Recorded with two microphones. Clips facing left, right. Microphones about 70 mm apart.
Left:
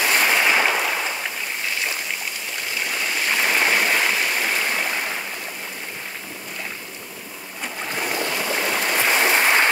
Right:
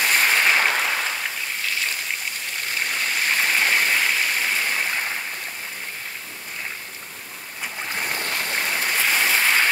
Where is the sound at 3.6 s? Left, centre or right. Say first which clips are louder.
Left 1 dB; centre.